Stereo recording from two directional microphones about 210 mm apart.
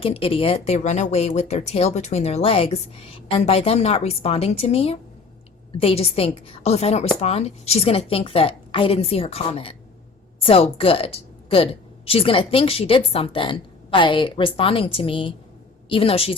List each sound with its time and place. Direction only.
0.0 s speech: 25° left (ahead or behind)